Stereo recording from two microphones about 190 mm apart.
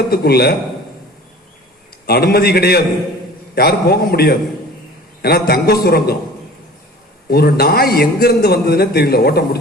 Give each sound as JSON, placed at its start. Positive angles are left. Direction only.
{"t": 0.1, "sound": "a man's voice", "side_deg": 55}
{"t": 2.0, "sound": "a man's voice", "side_deg": 55}
{"t": 7.3, "sound": "a man's voice", "side_deg": 55}